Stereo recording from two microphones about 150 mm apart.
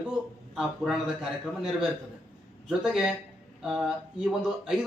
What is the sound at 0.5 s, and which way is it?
A man's voice, 5° right (ahead or behind).